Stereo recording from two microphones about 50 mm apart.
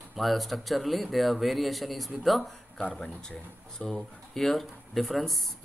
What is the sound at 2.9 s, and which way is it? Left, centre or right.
A man's voice, centre.